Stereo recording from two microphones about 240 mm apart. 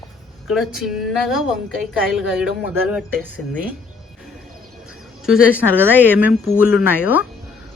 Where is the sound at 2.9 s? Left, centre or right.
Centre.